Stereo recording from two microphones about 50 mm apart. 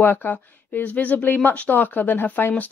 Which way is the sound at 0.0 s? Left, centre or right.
Left.